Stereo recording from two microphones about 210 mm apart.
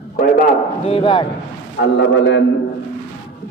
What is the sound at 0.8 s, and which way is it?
Speech, 25° left (ahead or behind).